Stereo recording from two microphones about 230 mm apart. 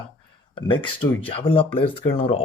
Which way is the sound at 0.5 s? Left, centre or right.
Left.